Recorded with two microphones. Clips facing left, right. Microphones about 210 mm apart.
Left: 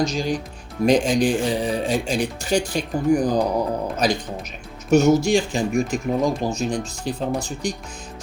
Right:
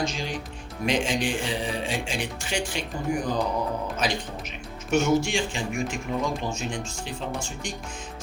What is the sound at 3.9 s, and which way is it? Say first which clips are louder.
Speech: left 6 dB; 40° left (ahead or behind).